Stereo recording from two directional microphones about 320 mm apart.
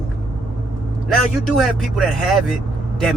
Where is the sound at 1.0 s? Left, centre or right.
Centre.